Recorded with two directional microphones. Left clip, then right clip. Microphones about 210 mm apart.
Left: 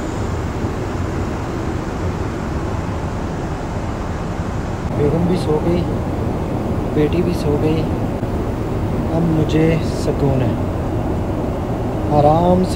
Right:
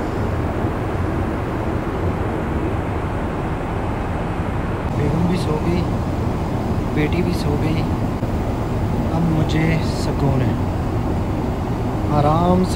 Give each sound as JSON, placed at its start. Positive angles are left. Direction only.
{"t": 7.0, "sound": "speech", "side_deg": 0}
{"t": 9.5, "sound": "speech", "side_deg": 0}
{"t": 12.2, "sound": "speech", "side_deg": -20}